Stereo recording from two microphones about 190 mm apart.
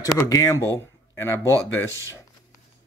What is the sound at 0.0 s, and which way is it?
Speech, 15° left (ahead or behind).